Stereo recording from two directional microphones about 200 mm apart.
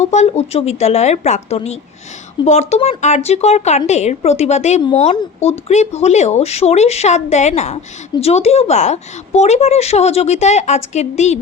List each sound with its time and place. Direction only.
0.0 s speech: 35° left (ahead or behind)